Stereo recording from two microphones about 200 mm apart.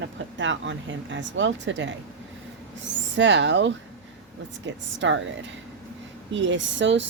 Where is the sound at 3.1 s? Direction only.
65° right (ahead or behind).